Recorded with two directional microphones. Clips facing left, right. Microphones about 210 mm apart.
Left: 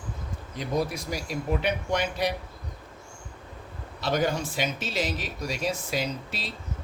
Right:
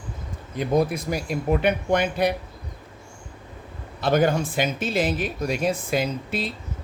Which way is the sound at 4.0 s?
55° right (ahead or behind).